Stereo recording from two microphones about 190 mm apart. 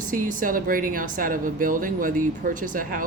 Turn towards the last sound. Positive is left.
turn(degrees=-45)  # may be behind; listen again after turning